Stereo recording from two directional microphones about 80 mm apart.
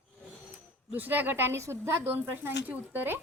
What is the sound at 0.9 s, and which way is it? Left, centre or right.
A woman's voice, right.